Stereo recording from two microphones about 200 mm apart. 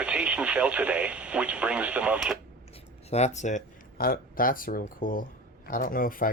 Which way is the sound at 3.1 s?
35° left (ahead or behind).